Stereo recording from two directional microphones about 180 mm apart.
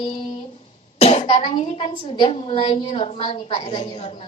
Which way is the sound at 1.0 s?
35° left (ahead or behind).